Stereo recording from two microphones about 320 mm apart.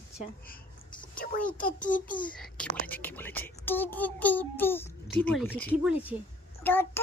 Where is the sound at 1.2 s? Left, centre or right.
Left.